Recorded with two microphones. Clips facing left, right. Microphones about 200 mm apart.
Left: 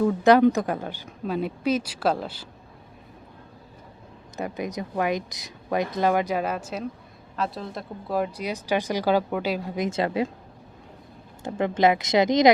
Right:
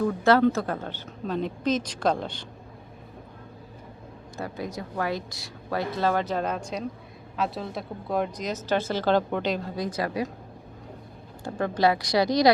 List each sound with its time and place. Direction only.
0.0 s speech: 15° left (ahead or behind)
4.4 s speech: 20° left (ahead or behind)
11.4 s speech: 20° left (ahead or behind)